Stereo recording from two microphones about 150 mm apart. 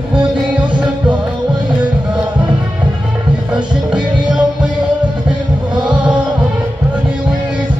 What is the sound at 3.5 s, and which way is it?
Music, 5° right (ahead or behind).